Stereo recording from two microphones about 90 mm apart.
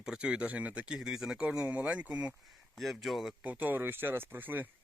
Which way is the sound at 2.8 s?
Centre (ahead or behind).